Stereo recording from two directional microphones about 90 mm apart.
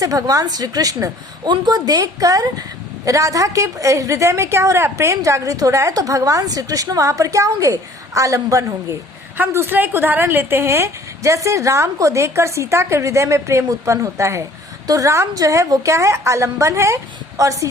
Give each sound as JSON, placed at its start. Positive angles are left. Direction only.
{"t": 0.0, "sound": "a woman's voice", "side_deg": -40}